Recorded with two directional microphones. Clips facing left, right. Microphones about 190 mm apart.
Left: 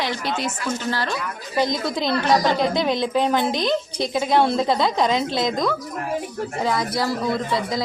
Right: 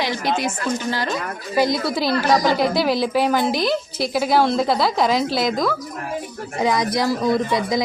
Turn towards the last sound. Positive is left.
turn(degrees=-15)  # may be behind; listen again after turning